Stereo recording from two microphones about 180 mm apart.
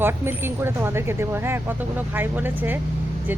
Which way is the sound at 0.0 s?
10° right (ahead or behind).